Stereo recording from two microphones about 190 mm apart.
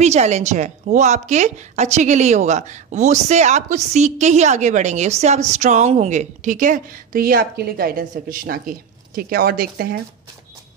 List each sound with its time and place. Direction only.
0.0 s a woman's voice: 35° right (ahead or behind); by 9.9 s 50° right (ahead or behind)